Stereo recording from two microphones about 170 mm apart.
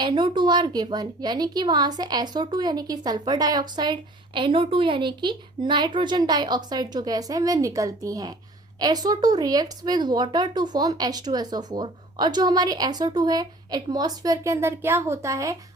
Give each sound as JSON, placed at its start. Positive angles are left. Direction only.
{"t": 0.0, "sound": "speech", "side_deg": -25}